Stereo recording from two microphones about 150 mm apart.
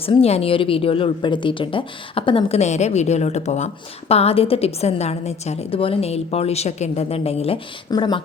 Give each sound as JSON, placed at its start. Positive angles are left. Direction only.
{"t": 0.0, "sound": "a woman's voice", "side_deg": 40}
{"t": 7.9, "sound": "speech", "side_deg": 30}